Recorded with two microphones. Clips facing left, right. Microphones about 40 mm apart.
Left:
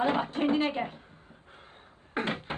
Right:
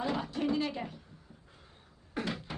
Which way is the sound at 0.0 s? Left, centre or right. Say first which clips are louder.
Left 6 dB; left.